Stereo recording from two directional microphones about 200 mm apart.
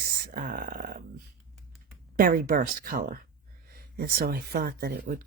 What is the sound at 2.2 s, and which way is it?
Speech, 45° right (ahead or behind).